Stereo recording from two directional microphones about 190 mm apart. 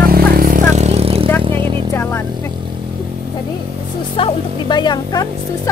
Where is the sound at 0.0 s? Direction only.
55° right (ahead or behind); by 1.3 s 30° right (ahead or behind).